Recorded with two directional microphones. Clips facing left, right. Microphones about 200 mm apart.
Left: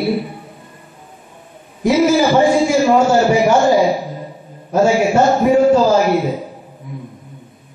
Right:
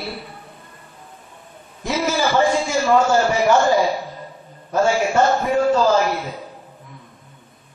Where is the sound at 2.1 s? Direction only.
20° left (ahead or behind).